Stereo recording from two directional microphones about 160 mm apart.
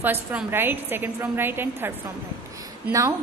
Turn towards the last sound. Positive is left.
turn(degrees=-20)  # may be behind; listen again after turning